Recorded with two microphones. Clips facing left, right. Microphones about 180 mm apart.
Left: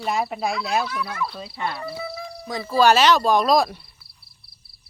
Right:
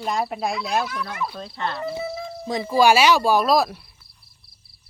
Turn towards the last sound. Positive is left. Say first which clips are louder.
# even
turn(degrees=0)  # may be behind; listen again after turning